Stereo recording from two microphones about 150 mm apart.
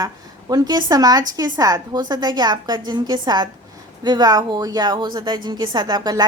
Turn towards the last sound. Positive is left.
turn(degrees=-25)  # may be behind; listen again after turning